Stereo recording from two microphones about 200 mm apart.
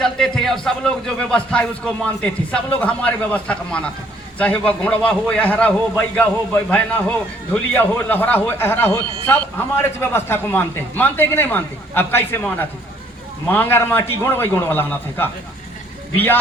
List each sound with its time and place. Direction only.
0.0 s a man's voice: 5° left (ahead or behind)